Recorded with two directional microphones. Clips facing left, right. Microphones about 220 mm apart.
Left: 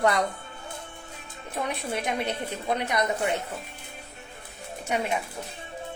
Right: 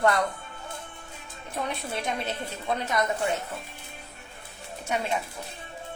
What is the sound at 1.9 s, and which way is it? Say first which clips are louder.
Speech: left 2 dB; 15° left (ahead or behind).